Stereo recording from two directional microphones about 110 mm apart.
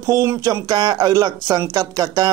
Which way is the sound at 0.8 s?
40° right (ahead or behind).